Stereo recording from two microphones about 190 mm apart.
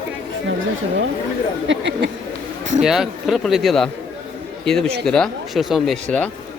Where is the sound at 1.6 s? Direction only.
75° right (ahead or behind).